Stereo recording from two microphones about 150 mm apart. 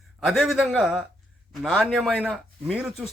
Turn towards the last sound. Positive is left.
turn(degrees=-5)  # may be behind; listen again after turning